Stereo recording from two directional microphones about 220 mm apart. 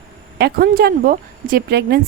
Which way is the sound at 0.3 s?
45° right (ahead or behind).